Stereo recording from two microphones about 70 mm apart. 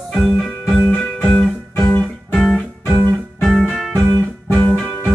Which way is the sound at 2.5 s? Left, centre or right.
Left.